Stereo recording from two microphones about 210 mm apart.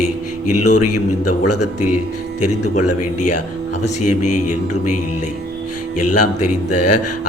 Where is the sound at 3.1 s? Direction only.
90° left.